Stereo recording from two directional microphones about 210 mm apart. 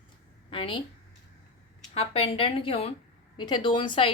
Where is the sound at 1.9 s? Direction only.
30° left (ahead or behind).